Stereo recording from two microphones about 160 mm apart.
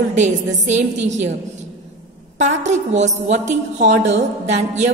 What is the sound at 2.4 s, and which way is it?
Speech, 45° right (ahead or behind).